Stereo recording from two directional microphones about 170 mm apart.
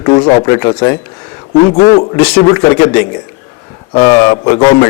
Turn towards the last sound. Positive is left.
turn(degrees=20)  # may be behind; listen again after turning